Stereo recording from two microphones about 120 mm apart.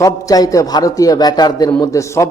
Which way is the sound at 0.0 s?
30° left (ahead or behind).